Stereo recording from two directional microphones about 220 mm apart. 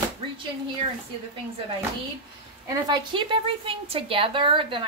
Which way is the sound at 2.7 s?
20° right (ahead or behind).